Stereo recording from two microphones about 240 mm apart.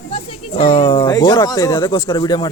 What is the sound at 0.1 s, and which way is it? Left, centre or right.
A man's voice, left.